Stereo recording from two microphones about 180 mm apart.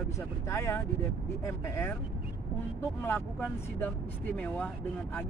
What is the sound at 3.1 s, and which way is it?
Speech, 10° left (ahead or behind).